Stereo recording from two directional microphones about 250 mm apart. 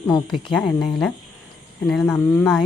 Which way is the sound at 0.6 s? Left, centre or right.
Centre.